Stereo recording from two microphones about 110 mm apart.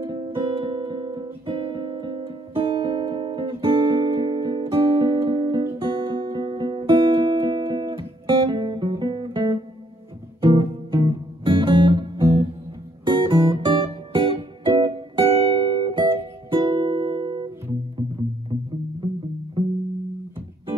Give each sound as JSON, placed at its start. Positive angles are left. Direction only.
{"t": 0.0, "sound": "music", "side_deg": -45}
{"t": 19.6, "sound": "music", "side_deg": -50}